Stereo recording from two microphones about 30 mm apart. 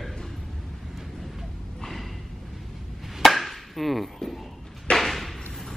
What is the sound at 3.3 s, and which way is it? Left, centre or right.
Chop, centre.